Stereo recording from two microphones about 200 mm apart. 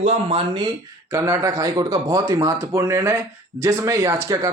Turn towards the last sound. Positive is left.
turn(degrees=-15)  # may be behind; listen again after turning